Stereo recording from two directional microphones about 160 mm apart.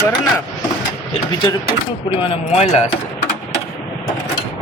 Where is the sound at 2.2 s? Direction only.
40° left (ahead or behind).